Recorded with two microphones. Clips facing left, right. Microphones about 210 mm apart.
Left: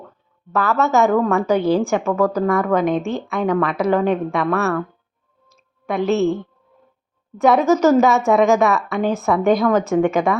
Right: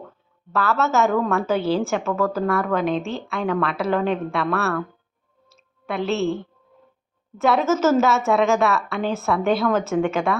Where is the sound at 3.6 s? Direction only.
15° left (ahead or behind).